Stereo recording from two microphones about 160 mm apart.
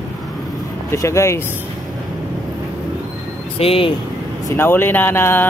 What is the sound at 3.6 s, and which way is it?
Speech, 35° left (ahead or behind).